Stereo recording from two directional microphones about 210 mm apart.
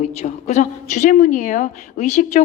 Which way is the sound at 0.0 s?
35° left (ahead or behind).